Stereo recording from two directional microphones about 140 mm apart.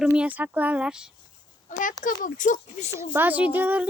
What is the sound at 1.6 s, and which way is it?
Speech, 70° left (ahead or behind).